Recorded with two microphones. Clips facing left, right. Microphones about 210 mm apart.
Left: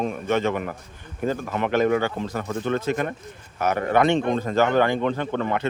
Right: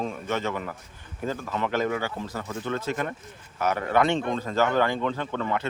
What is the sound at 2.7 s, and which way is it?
Speech, 55° left (ahead or behind).